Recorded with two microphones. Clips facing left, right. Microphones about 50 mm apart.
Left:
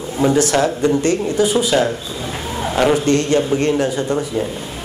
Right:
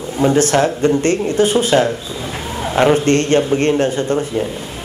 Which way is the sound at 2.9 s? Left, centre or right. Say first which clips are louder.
Right 2 dB; right.